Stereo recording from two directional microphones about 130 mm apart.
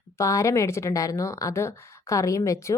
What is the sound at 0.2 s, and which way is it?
Speech, 25° left (ahead or behind).